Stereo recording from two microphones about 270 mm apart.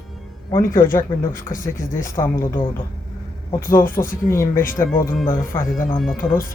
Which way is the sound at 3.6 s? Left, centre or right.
Left.